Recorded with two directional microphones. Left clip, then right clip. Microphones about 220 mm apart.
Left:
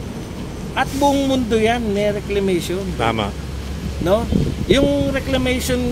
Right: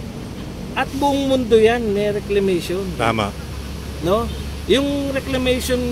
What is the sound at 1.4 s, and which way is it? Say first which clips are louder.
Speech: right 3 dB; 5° left (ahead or behind).